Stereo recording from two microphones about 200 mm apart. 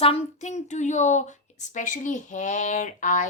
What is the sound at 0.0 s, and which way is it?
A woman's voice, 30° left (ahead or behind).